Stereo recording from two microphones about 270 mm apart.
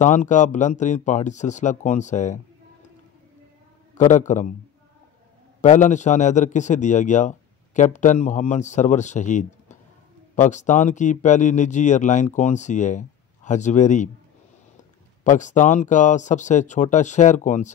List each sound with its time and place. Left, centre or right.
0.0 s a man's voice: left
3.9 s a man's voice: left
5.6 s a man's voice: left
15.2 s a man's voice: left